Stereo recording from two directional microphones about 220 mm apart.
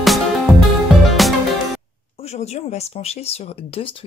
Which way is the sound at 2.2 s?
30° left (ahead or behind).